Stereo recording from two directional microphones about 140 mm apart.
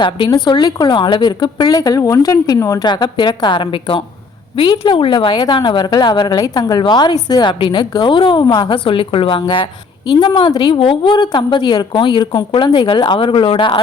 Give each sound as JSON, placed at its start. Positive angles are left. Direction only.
{"t": 0.0, "sound": "a woman's voice", "side_deg": 35}